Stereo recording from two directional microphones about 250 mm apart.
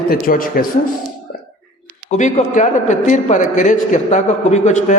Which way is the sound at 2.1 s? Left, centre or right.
Left.